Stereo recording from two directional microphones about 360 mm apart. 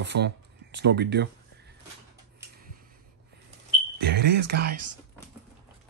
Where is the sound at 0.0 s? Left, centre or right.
Right.